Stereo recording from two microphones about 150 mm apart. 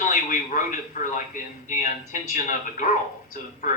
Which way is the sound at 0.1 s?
60° left (ahead or behind).